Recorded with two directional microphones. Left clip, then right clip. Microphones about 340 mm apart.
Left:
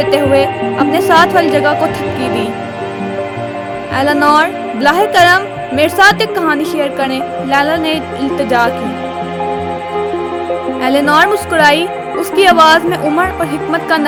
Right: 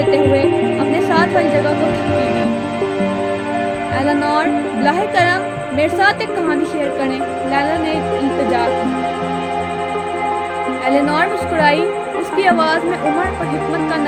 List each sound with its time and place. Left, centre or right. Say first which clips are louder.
0.0 s speech: left 3 dB; left
3.9 s speech: left 8 dB; left
10.8 s speech: left 6 dB; left